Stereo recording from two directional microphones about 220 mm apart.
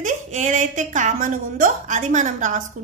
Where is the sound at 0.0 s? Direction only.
35° right (ahead or behind).